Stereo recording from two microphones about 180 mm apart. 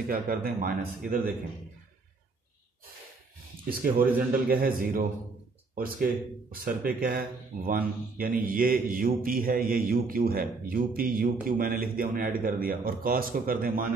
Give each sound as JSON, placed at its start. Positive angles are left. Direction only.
{"t": 0.1, "sound": "speech", "side_deg": -55}
{"t": 3.6, "sound": "speech", "side_deg": -55}
{"t": 6.5, "sound": "speech", "side_deg": -55}